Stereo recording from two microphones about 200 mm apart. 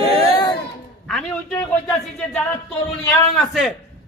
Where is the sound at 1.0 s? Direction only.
5° left (ahead or behind).